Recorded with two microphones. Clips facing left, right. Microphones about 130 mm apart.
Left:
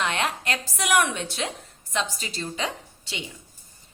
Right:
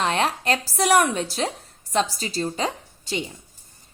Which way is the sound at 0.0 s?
35° right (ahead or behind).